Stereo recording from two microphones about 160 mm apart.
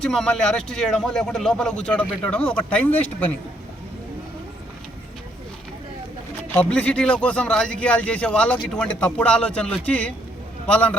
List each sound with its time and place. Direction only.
0.0 s speech: 5° left (ahead or behind)
6.5 s a man's voice: 10° left (ahead or behind)